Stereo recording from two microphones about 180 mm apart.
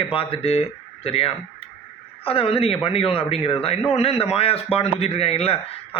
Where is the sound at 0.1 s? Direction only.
30° left (ahead or behind).